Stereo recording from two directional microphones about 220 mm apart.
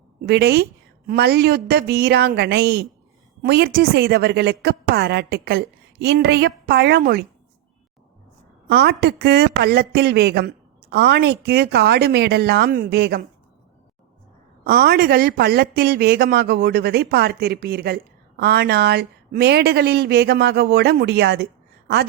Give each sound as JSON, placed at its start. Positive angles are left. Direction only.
{"t": 0.3, "sound": "speech", "side_deg": -45}
{"t": 8.6, "sound": "speech", "side_deg": -45}
{"t": 14.6, "sound": "speech", "side_deg": -45}